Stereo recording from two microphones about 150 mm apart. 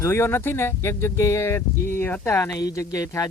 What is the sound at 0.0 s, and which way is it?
A man's voice, 15° left (ahead or behind).